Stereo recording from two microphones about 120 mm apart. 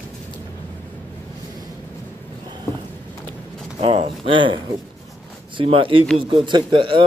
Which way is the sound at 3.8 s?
50° right (ahead or behind).